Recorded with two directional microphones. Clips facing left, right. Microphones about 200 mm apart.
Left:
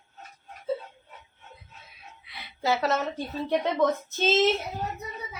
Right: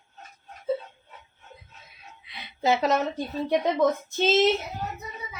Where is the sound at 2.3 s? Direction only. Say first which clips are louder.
Right 3 dB; 20° right (ahead or behind).